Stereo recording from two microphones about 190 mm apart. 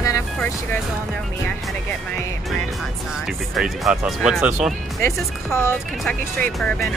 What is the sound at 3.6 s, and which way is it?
Speech, 5° right (ahead or behind).